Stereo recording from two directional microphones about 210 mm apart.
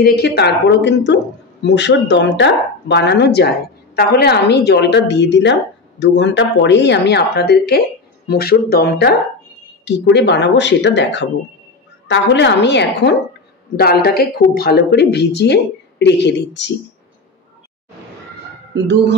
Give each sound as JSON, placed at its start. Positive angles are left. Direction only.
{"t": 0.0, "sound": "speech", "side_deg": 50}
{"t": 18.8, "sound": "speech", "side_deg": -55}